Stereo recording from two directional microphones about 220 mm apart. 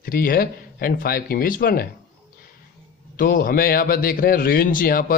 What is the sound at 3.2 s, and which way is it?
Speech, 40° left (ahead or behind).